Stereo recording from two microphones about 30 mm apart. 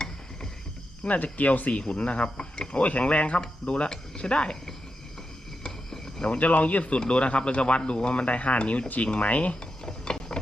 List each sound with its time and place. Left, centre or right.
1.0 s speech: left
1.9 s speech: left
2.8 s speech: left
3.8 s speech: left
5.6 s a sound: left
6.2 s speech: left
9.8 s a sound: left